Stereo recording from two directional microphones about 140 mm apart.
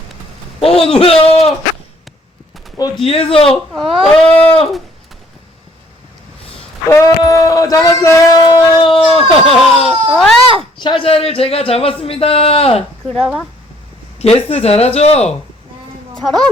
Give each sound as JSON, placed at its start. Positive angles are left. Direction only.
{"t": 0.6, "sound": "a man's voice", "side_deg": 45}
{"t": 3.0, "sound": "speech", "side_deg": 45}
{"t": 6.9, "sound": "speech", "side_deg": 25}
{"t": 9.9, "sound": "speech", "side_deg": 0}
{"t": 10.8, "sound": "speech", "side_deg": 35}
{"t": 13.1, "sound": "a woman's voice", "side_deg": 0}
{"t": 14.2, "sound": "speech", "side_deg": 50}
{"t": 16.2, "sound": "a woman's voice", "side_deg": 0}